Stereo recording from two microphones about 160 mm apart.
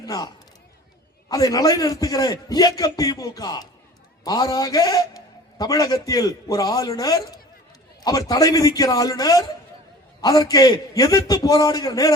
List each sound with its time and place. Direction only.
0.0 s a man's voice: 25° left (ahead or behind)